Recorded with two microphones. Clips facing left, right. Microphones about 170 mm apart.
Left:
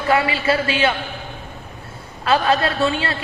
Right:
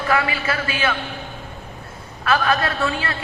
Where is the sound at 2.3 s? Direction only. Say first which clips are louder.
Left 2 dB; 25° left (ahead or behind).